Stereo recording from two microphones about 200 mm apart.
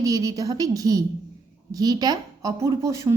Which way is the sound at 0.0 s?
15° right (ahead or behind).